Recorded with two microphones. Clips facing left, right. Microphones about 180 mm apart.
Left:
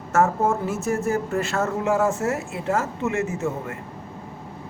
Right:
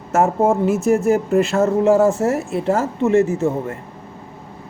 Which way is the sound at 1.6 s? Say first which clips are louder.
Right 7 dB; 35° right (ahead or behind).